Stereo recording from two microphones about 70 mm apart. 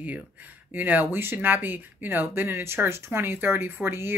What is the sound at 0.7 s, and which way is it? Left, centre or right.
Speech, right.